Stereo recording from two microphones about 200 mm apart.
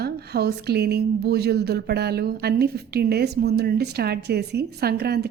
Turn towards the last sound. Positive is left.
turn(degrees=-50)  # may be behind; listen again after turning